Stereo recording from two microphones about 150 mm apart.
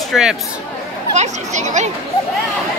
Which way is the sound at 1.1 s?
50° right (ahead or behind).